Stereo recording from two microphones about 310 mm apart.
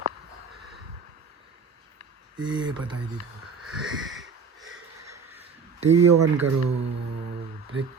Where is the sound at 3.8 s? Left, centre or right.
Right.